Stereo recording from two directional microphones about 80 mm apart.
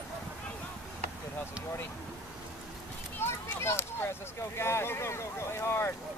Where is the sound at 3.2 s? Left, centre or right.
Left.